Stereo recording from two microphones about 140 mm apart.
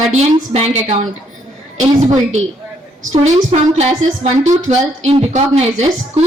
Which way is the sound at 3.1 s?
50° right (ahead or behind).